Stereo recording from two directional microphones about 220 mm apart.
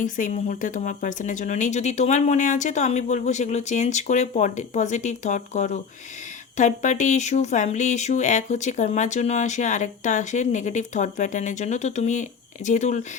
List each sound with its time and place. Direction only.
0.0 s speech: 35° left (ahead or behind)